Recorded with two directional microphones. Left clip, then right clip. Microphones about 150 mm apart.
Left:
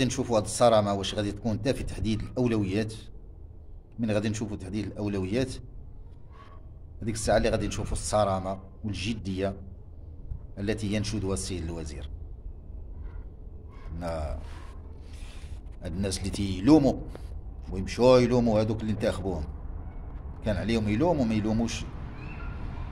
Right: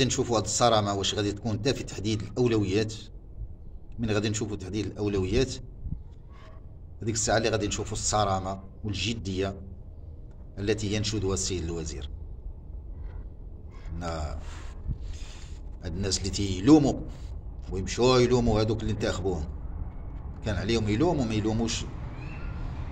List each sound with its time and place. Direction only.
0.0 s a man's voice: 15° left (ahead or behind)
7.0 s a man's voice: 15° left (ahead or behind)
13.9 s a man's voice: 15° left (ahead or behind)
15.8 s a man's voice: 15° left (ahead or behind)